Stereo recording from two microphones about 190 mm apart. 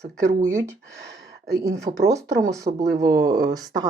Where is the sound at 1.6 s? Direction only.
15° right (ahead or behind).